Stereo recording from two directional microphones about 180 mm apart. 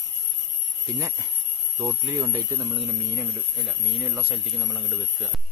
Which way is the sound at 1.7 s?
20° right (ahead or behind).